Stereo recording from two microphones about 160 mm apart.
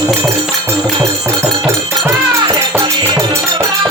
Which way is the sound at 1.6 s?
20° right (ahead or behind).